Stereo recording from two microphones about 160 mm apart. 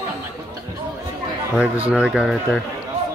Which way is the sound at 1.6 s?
10° right (ahead or behind).